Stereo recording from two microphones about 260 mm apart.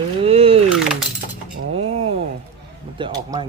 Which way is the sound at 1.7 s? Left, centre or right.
Right.